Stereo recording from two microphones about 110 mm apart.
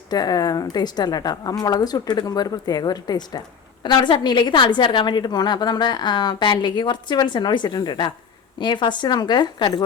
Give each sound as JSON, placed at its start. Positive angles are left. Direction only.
{"t": 0.1, "sound": "a woman's voice", "side_deg": 35}